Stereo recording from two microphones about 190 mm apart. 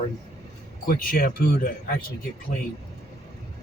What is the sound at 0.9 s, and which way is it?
Speech, 50° left (ahead or behind).